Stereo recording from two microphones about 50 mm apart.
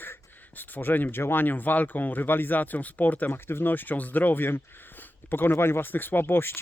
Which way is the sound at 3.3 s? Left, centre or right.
Left.